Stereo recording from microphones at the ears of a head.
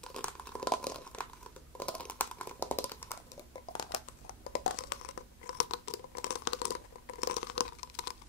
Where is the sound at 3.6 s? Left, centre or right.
Left.